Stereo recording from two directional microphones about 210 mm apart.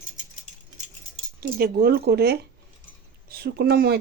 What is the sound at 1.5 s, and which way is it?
Speech, 45° right (ahead or behind).